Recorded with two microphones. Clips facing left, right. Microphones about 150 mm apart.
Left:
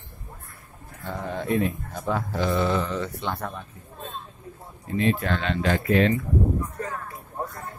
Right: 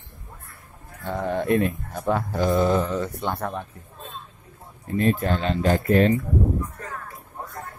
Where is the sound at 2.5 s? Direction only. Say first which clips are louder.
Right 4 dB; 40° right (ahead or behind); by 3.6 s 55° right (ahead or behind).